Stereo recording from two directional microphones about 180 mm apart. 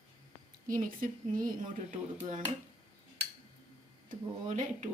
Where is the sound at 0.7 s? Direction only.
50° right (ahead or behind).